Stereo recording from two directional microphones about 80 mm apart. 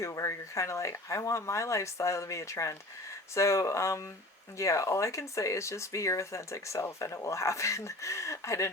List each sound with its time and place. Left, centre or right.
0.0 s speech: left